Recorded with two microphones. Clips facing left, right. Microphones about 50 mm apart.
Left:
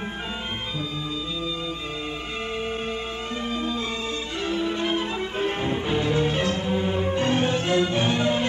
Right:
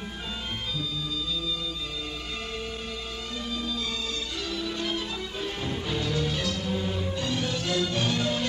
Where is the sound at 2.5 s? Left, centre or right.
Left.